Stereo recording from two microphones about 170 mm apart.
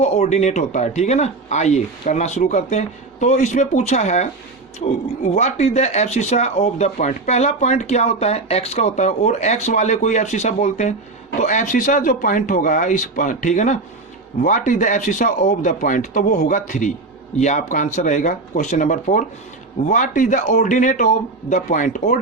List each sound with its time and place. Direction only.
0.0 s speech: 40° left (ahead or behind)